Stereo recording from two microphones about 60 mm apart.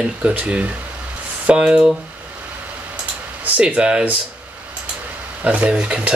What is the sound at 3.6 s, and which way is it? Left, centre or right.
Speech, centre.